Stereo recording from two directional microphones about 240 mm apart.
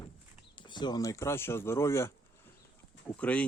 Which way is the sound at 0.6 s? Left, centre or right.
Centre.